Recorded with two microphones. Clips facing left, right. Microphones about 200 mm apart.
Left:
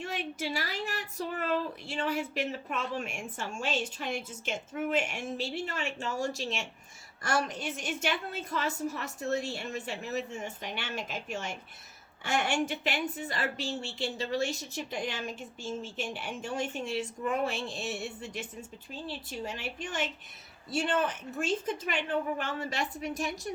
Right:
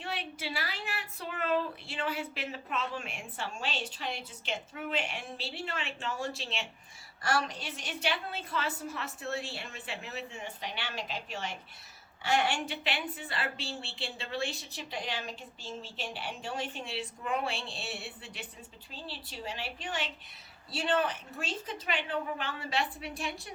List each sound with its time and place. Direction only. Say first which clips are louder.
0.0 s speech: left 3 dB; 45° left (ahead or behind)